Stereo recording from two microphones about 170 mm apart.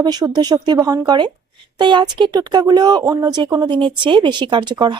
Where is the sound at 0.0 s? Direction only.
25° right (ahead or behind).